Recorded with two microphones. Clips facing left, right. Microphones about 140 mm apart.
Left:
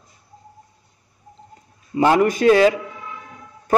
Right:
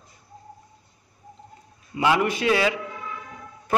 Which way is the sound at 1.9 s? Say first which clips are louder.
Left 6 dB; 45° left (ahead or behind).